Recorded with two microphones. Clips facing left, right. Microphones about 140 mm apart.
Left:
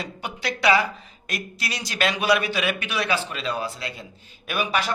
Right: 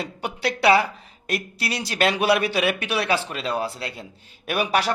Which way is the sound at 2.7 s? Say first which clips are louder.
Right 2 dB; 35° right (ahead or behind).